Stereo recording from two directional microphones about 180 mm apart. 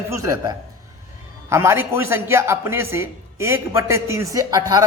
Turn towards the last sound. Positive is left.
turn(degrees=-20)  # may be behind; listen again after turning